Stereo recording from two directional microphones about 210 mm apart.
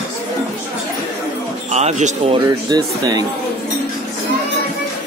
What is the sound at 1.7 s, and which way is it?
Speech, 30° right (ahead or behind).